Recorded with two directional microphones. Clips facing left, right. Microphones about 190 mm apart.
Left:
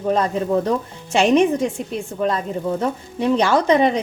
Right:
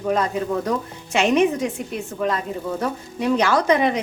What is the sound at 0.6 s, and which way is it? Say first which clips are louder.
Speech: left 3 dB; 30° left (ahead or behind).